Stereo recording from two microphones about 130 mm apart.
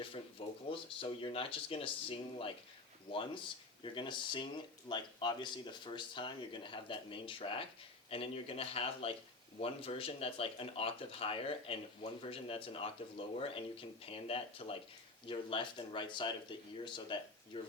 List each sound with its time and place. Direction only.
0.0 s speech: 45° left (ahead or behind)